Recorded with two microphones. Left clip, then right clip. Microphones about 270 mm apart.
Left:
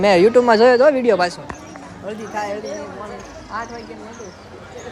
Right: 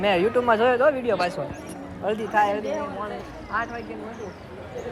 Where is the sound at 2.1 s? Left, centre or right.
Centre.